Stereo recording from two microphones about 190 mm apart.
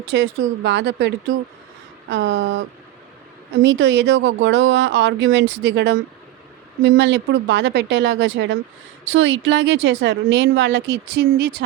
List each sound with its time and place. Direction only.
0.1 s speech: 70° right (ahead or behind)
9.0 s speech: 85° right; by 11.5 s 65° right (ahead or behind)